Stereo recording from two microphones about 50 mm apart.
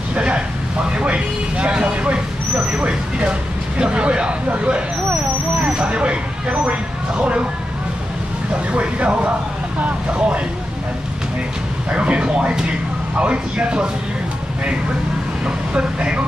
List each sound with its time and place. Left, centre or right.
0.1 s a sound: right
0.9 s speech: right
8.7 s speech: right
11.9 s speech: right
15.4 s speech: right